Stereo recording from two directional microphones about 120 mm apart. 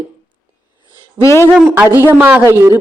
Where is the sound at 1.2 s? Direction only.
25° left (ahead or behind).